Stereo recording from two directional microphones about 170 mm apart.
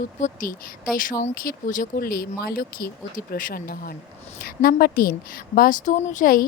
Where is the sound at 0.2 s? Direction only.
50° left (ahead or behind).